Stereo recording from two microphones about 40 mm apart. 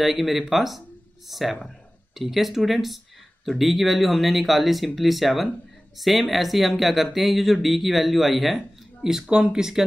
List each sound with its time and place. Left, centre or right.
0.0 s speech: centre
9.3 s speech: centre